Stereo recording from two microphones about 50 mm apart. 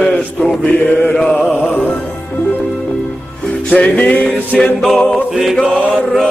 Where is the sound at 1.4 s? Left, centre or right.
Left.